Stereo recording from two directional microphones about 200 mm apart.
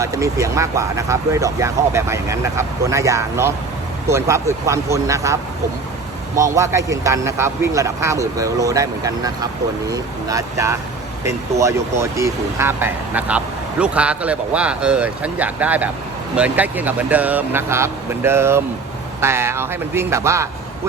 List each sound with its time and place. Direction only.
0.0 s speech: 15° right (ahead or behind)